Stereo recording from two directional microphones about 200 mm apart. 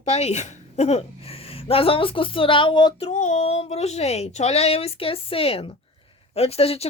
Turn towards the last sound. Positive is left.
turn(degrees=30)  # may be behind; listen again after turning